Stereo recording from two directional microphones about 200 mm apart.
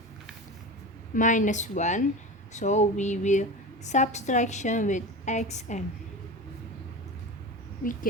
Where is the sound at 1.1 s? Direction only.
40° left (ahead or behind).